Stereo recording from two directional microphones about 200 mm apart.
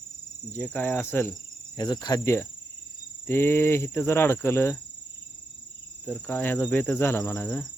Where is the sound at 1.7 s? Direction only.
20° left (ahead or behind).